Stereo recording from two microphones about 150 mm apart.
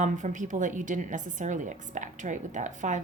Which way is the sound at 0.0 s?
55° right (ahead or behind).